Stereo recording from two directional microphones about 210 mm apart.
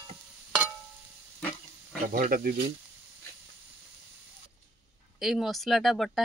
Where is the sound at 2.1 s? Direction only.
40° right (ahead or behind).